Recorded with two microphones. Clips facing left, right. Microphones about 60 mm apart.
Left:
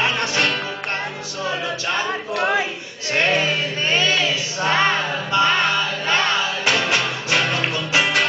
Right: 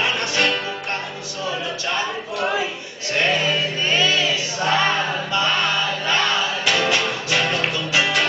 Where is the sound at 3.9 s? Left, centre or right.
Left.